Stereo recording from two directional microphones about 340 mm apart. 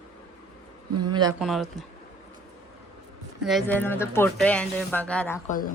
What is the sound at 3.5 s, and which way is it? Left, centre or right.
Speech, centre.